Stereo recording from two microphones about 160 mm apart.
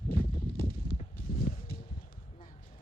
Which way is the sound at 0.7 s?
65° left (ahead or behind).